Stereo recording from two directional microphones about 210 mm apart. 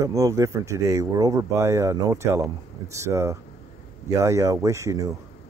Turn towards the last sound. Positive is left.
turn(degrees=-15)  # may be behind; listen again after turning